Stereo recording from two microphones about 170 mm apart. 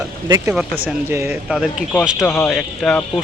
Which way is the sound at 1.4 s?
5° right (ahead or behind).